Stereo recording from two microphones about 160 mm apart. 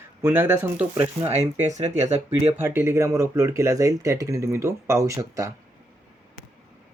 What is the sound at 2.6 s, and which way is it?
Speech, 15° right (ahead or behind).